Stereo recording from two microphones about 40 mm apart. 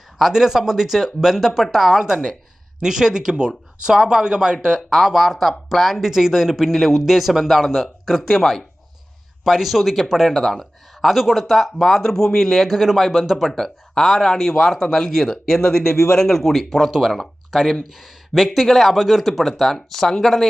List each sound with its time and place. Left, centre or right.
0.2 s speech: centre
4.9 s speech: centre
6.1 s speech: centre
9.4 s speech: centre
12.6 s speech: centre
13.5 s speech: centre
17.5 s speech: centre
18.0 s speech: centre